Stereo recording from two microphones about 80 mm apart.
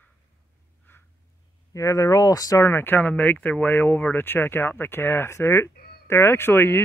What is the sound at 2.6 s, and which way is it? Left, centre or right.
Speech, left.